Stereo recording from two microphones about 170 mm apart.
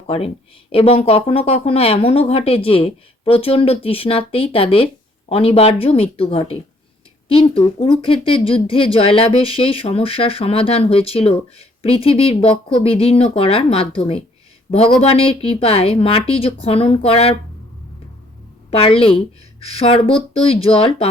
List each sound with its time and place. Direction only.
0.7 s speech: 35° left (ahead or behind)
18.7 s speech: 35° left (ahead or behind)